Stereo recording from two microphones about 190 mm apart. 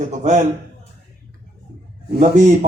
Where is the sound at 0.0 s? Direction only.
40° right (ahead or behind).